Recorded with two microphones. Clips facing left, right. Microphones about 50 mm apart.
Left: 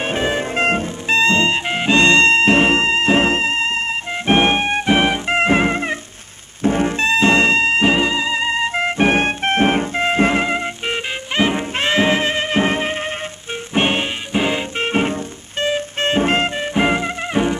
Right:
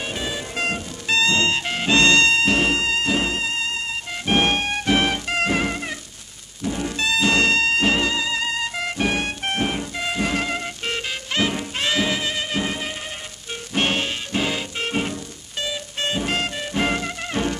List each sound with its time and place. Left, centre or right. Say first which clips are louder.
0.0 s music: left 8 dB; left
13.7 s music: left 4 dB; left